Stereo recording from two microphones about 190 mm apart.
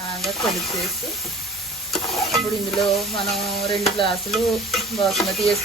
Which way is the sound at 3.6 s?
25° left (ahead or behind).